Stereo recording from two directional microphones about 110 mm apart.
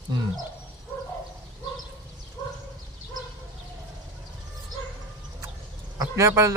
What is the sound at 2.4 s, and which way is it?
Bow-wow, 35° left (ahead or behind).